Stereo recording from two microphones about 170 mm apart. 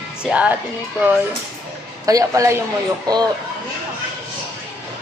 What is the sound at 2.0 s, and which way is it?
Speech, 20° right (ahead or behind).